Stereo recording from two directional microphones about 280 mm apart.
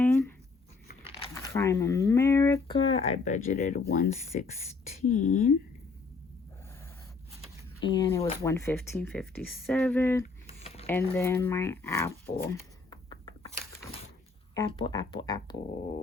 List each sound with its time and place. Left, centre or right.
0.0 s a sound: centre
1.0 s speech: centre; by 5.5 s left
7.9 s speech: centre
10.6 s a sound: left
10.8 s speech: centre
14.5 s speech: centre